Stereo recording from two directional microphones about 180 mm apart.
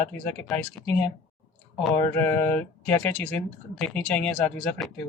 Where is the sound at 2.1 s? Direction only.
10° left (ahead or behind).